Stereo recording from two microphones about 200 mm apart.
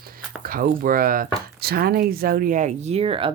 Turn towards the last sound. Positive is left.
turn(degrees=-25)  # may be behind; listen again after turning